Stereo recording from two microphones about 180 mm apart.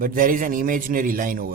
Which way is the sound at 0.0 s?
50° right (ahead or behind).